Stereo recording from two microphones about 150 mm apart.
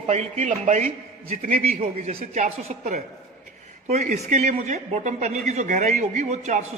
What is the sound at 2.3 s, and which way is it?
A man's voice, 50° right (ahead or behind).